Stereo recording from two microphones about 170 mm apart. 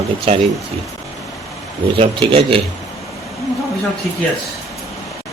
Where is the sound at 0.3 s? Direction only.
35° right (ahead or behind).